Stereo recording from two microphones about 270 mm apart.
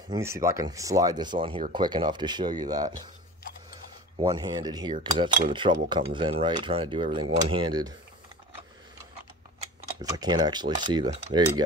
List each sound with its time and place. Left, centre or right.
0.1 s speech: centre
4.2 s speech: centre
4.9 s cutlery: right
7.4 s speech: centre
10.1 s speech: centre